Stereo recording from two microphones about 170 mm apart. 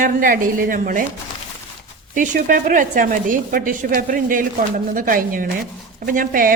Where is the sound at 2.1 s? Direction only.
50° right (ahead or behind).